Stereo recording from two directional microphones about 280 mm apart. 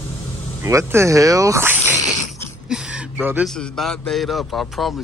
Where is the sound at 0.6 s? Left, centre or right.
Centre.